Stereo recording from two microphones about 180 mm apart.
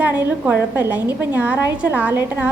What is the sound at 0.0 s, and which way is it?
A woman's voice, 10° right (ahead or behind).